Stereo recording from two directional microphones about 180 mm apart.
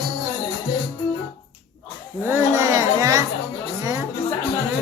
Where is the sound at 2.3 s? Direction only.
20° right (ahead or behind).